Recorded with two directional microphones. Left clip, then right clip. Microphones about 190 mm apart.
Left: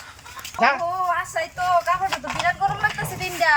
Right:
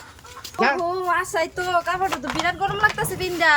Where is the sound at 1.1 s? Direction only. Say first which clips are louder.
Right 3 dB; 35° right (ahead or behind).